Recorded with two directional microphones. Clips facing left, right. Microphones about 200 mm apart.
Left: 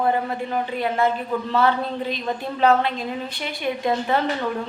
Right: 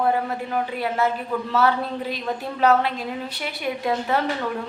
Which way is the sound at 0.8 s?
5° right (ahead or behind).